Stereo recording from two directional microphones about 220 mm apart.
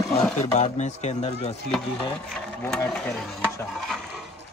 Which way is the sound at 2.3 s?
Centre (ahead or behind).